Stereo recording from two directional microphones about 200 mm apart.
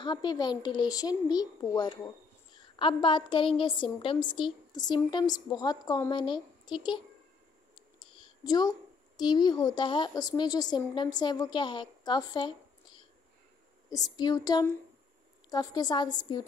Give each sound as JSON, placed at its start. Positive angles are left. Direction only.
{"t": 0.0, "sound": "speech", "side_deg": 20}
{"t": 8.0, "sound": "a woman's voice", "side_deg": 20}